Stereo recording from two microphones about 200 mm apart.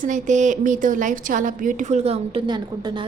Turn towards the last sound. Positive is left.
turn(degrees=-20)  # may be behind; listen again after turning